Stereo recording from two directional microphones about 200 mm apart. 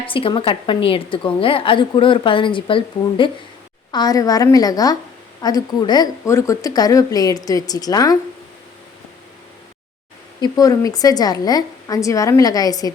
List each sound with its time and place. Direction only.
0.0 s a woman's voice: 25° left (ahead or behind)
10.4 s a woman's voice: 20° left (ahead or behind)